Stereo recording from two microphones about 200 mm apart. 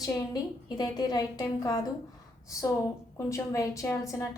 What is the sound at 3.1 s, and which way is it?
A woman's voice, 15° left (ahead or behind).